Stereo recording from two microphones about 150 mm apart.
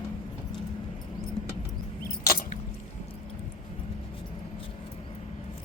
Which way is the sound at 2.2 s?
70° left (ahead or behind).